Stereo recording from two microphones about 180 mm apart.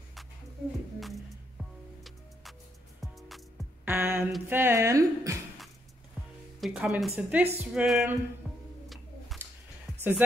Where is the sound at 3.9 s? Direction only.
10° right (ahead or behind).